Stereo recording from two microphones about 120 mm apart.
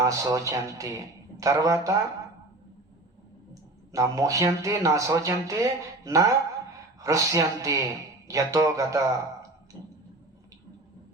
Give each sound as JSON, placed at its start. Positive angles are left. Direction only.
{"t": 0.0, "sound": "speech", "side_deg": -30}
{"t": 3.5, "sound": "speech", "side_deg": -30}